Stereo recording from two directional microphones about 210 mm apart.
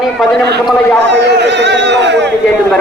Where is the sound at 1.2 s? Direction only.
55° right (ahead or behind).